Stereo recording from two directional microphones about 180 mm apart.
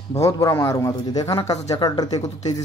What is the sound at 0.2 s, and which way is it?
Speech, 15° left (ahead or behind).